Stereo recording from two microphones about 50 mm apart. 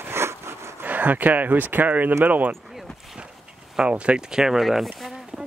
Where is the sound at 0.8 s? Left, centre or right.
Right.